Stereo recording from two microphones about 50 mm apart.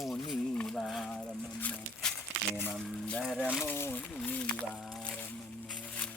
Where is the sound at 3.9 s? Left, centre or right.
Left.